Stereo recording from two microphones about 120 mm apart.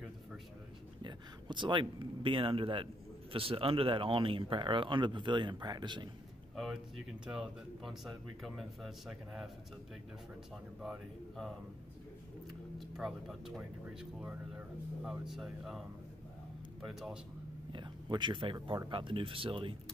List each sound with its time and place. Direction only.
1.0 s speech: 40° right (ahead or behind)
6.5 s speech: centre (ahead or behind)
10.8 s speech: centre (ahead or behind)
12.7 s speech: centre (ahead or behind)
15.0 s speech: 5° right (ahead or behind)
16.8 s speech: centre (ahead or behind)
17.7 s speech: 40° right (ahead or behind)